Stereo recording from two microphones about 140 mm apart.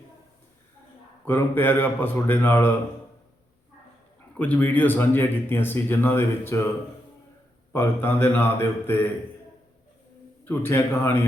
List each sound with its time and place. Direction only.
1.2 s speech: 15° left (ahead or behind)
4.4 s speech: 10° left (ahead or behind)
7.7 s speech: 15° left (ahead or behind)
10.4 s speech: 15° left (ahead or behind)